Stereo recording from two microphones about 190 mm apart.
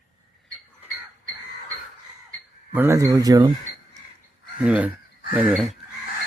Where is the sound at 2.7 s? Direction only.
15° right (ahead or behind).